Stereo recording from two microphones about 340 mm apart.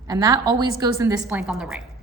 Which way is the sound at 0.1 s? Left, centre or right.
Centre.